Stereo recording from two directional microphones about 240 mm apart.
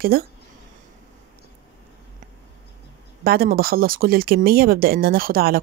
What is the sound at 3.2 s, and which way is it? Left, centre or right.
Speech, right.